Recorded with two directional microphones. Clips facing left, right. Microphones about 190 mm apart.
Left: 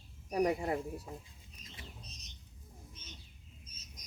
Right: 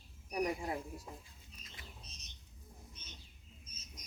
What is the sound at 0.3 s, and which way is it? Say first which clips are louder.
Speech: left 5 dB; 90° left.